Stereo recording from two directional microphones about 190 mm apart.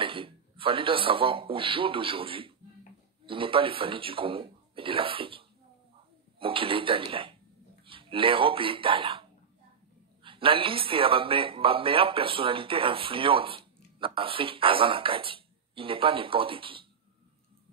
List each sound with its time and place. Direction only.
0.0 s speech: 30° right (ahead or behind)
6.4 s speech: 30° right (ahead or behind)
10.2 s speech: 25° right (ahead or behind)